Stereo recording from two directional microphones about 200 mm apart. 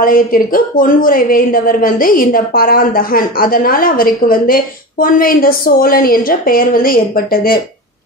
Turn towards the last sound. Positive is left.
turn(degrees=45)  # may be behind; listen again after turning